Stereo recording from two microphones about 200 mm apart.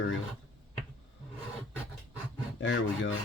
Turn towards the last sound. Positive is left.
turn(degrees=70)  # may be behind; listen again after turning